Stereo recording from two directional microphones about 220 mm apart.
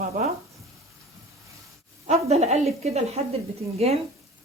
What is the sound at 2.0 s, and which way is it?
A woman's voice, 30° right (ahead or behind).